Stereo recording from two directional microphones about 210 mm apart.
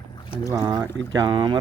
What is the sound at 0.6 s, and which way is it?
Speech, 20° right (ahead or behind).